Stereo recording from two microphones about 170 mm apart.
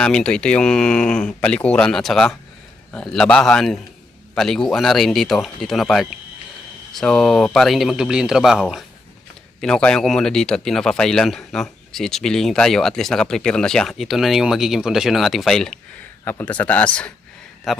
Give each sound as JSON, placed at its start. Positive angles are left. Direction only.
{"t": 0.0, "sound": "speech", "side_deg": 5}
{"t": 16.2, "sound": "a man's voice", "side_deg": 10}